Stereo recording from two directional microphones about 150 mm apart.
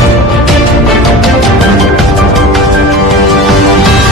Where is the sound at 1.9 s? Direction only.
Centre (ahead or behind).